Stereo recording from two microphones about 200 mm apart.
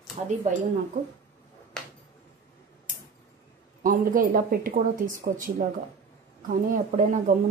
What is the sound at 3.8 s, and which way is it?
A woman's voice, 45° right (ahead or behind).